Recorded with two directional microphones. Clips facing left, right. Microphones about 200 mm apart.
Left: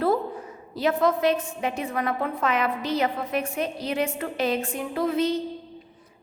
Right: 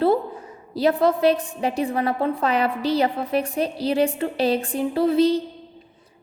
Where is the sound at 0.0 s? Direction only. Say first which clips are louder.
Right 4 dB; 30° right (ahead or behind).